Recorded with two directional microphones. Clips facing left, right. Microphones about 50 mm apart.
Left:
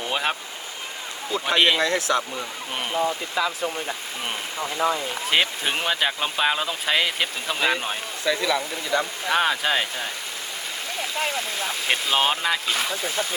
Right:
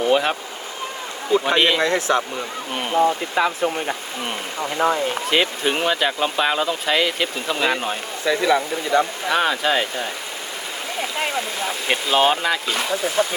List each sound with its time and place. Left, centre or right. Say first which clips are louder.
0.1 s speech: right 6 dB; centre
1.5 s speech: left 1 dB; centre
1.8 s speech: right 3 dB; right
4.8 s speech: right 4 dB; right
5.3 s speech: right 1 dB; centre
8.3 s speech: right 5 dB; right
9.2 s speech: right 2 dB; centre
11.7 s speech: right 3 dB; centre